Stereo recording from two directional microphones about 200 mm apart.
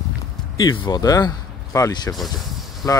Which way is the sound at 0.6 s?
20° left (ahead or behind).